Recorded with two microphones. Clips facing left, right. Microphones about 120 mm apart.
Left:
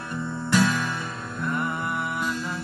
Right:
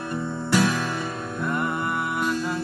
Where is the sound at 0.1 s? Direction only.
15° right (ahead or behind).